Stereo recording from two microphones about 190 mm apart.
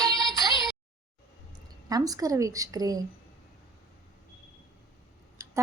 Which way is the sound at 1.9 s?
20° right (ahead or behind).